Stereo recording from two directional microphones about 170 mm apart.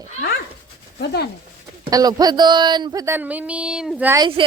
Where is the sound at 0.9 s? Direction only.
70° left (ahead or behind).